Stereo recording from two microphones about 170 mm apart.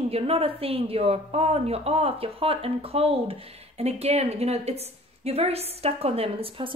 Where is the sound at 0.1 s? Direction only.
35° right (ahead or behind).